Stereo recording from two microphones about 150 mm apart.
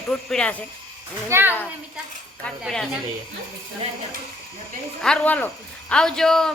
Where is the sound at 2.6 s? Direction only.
5° left (ahead or behind).